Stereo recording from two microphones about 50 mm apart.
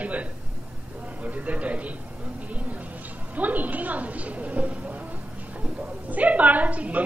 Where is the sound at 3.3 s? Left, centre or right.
Right.